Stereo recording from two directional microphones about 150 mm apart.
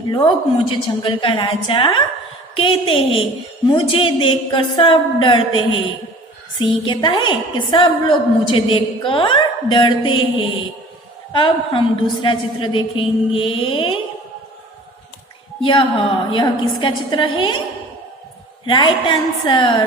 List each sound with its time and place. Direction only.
0.1 s a woman's voice: 30° left (ahead or behind)
15.6 s a woman's voice: 35° left (ahead or behind)
18.6 s a woman's voice: 30° left (ahead or behind)